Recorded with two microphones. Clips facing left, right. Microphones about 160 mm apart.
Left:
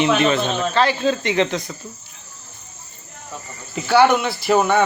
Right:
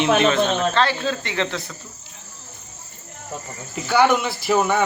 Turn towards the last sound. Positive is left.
turn(degrees=0)  # may be behind; listen again after turning